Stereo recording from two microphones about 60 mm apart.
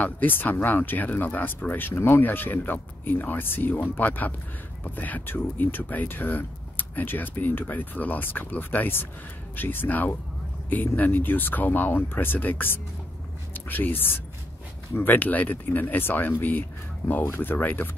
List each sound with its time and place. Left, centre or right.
0.0 s speech: left